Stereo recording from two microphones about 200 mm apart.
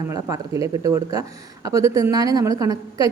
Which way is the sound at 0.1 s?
15° right (ahead or behind).